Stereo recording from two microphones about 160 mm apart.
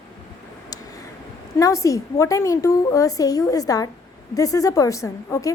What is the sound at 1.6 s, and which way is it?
A woman's voice, 20° left (ahead or behind).